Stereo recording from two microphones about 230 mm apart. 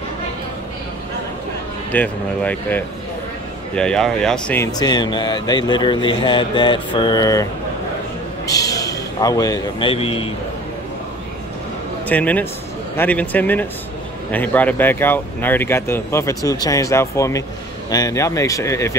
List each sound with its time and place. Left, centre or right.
1.9 s speech: centre
4.7 s speech: centre
8.5 s a man's voice: centre
12.1 s speech: centre